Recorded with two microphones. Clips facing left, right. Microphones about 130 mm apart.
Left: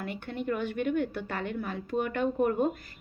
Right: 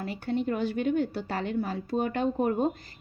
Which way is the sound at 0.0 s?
35° right (ahead or behind).